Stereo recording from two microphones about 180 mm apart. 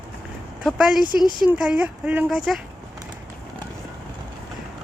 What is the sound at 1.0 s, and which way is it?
Speech, 25° left (ahead or behind).